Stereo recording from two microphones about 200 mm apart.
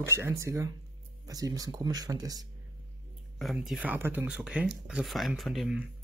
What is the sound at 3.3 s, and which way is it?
Speech, centre (ahead or behind).